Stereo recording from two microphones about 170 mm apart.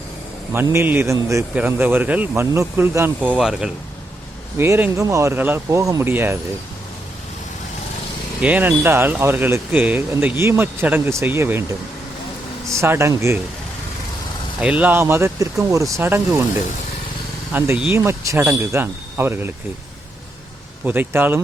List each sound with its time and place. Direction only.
0.5 s speech: 15° right (ahead or behind)
4.5 s speech: 15° right (ahead or behind)
8.4 s speech: 10° right (ahead or behind)
12.8 s speech: 15° right (ahead or behind)
14.6 s speech: 10° right (ahead or behind)
17.5 s speech: 15° right (ahead or behind)
20.8 s speech: 10° right (ahead or behind)